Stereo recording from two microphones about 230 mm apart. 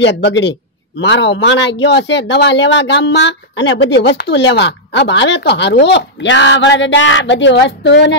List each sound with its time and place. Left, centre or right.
0.0 s speech: left